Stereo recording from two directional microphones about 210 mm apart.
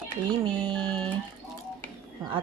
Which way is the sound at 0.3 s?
20° right (ahead or behind).